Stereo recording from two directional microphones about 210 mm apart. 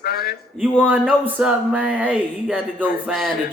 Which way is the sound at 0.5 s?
5° right (ahead or behind).